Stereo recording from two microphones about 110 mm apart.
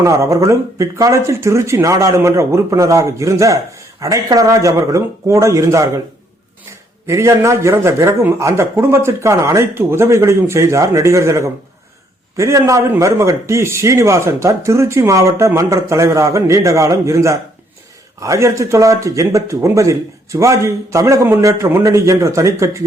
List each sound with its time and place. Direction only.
0.0 s speech: 30° right (ahead or behind)
7.1 s speech: 25° right (ahead or behind)